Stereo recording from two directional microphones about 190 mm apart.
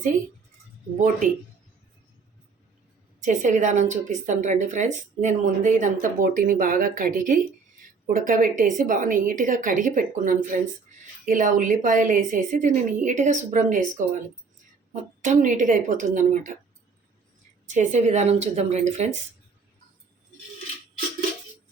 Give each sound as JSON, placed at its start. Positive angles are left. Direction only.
{"t": 0.9, "sound": "a woman's voice", "side_deg": -40}
{"t": 3.2, "sound": "a woman's voice", "side_deg": -40}
{"t": 15.2, "sound": "a woman's voice", "side_deg": -40}
{"t": 17.7, "sound": "a woman's voice", "side_deg": -40}